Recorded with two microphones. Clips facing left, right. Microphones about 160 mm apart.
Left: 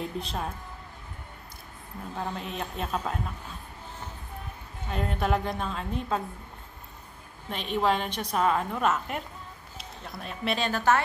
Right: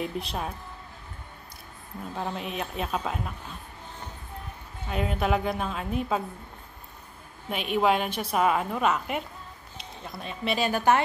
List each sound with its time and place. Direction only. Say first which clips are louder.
0.0 s a woman's voice: right 1 dB; centre (ahead or behind)
2.5 s a woman's voice: right 1 dB; centre (ahead or behind)
4.8 s a woman's voice: right 2 dB; 5° right (ahead or behind)
7.4 s a woman's voice: right 2 dB; 10° right (ahead or behind)
10.7 s a woman's voice: right 2 dB; 15° right (ahead or behind)